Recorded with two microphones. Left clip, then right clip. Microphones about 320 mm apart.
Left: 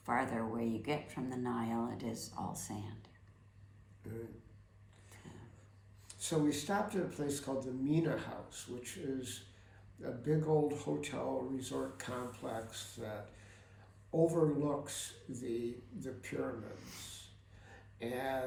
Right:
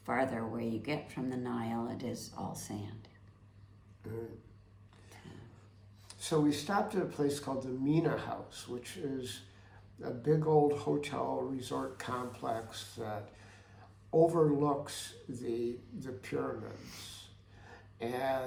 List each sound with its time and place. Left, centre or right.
0.0 s speech: centre
6.1 s speech: centre
16.7 s speech: centre
17.7 s a sound: centre